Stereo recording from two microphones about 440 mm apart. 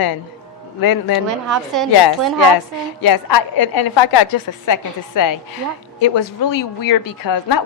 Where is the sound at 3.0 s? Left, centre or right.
Left.